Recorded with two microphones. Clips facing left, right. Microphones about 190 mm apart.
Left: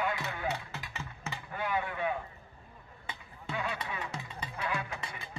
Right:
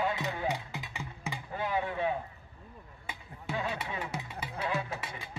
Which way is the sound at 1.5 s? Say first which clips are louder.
Right 1 dB; 30° right (ahead or behind).